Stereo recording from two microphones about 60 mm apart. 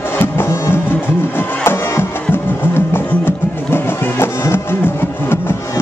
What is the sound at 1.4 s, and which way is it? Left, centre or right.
Music, left.